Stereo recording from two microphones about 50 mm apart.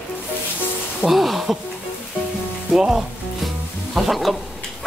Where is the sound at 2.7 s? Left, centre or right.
Centre.